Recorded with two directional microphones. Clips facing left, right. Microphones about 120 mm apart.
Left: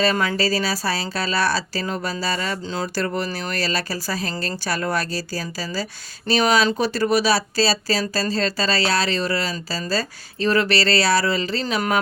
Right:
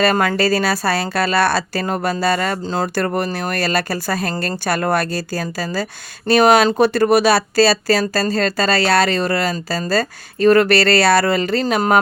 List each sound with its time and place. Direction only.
0.0 s speech: 55° right (ahead or behind)